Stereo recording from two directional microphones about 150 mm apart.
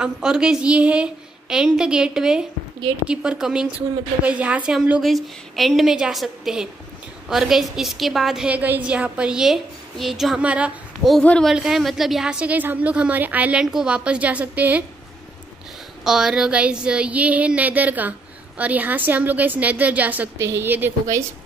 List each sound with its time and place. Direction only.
0.0 s a woman's voice: 5° right (ahead or behind)
11.1 s a woman's voice: 5° left (ahead or behind)
16.0 s a woman's voice: 5° right (ahead or behind)